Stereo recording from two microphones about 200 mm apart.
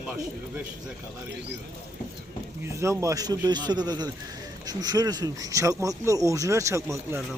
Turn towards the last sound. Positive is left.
turn(degrees=-15)  # may be behind; listen again after turning